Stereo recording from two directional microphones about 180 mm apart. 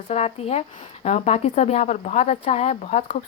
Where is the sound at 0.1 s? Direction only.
35° left (ahead or behind).